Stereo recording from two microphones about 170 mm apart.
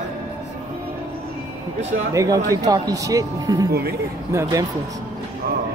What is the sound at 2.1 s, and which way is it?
Speech, 20° right (ahead or behind).